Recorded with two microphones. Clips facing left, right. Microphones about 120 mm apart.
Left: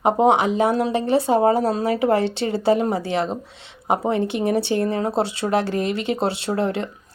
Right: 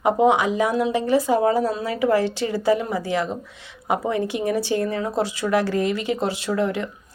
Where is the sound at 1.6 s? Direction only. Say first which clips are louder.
Left 2 dB; 35° left (ahead or behind).